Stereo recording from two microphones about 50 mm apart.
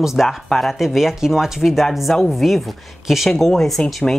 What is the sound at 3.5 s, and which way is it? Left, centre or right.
Speech, centre.